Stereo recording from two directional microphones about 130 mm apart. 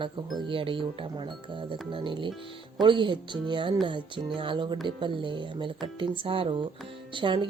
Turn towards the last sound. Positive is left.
turn(degrees=-40)  # may be behind; listen again after turning